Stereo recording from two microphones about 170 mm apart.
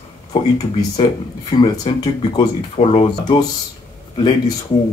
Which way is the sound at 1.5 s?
25° left (ahead or behind).